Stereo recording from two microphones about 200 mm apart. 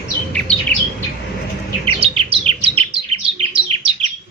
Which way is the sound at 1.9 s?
30° right (ahead or behind).